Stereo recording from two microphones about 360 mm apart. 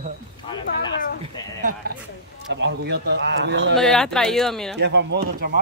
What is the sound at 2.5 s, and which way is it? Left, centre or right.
A man's voice, right.